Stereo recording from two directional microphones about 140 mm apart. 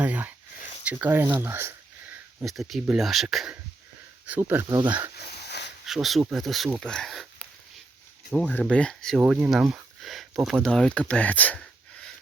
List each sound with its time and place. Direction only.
0.0 s a sound: 10° right (ahead or behind)
0.9 s speech: 15° right (ahead or behind)
2.4 s speech: centre (ahead or behind)
4.3 s speech: 15° right (ahead or behind)
4.7 s speech: 35° right (ahead or behind)
5.8 s speech: centre (ahead or behind)